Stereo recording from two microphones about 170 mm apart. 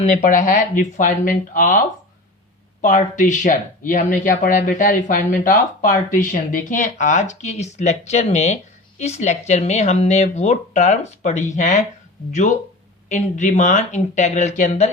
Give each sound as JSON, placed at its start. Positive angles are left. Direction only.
{"t": 0.0, "sound": "speech", "side_deg": 45}
{"t": 2.8, "sound": "speech", "side_deg": 50}